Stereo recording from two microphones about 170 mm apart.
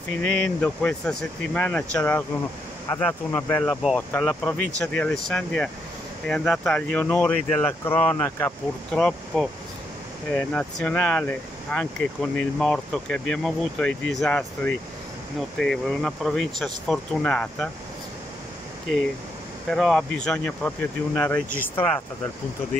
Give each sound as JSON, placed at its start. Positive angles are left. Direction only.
{"t": 0.3, "sound": "speech", "side_deg": 5}
{"t": 19.7, "sound": "speech", "side_deg": 0}